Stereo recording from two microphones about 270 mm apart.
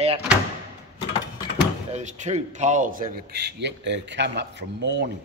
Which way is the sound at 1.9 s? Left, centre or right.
Right.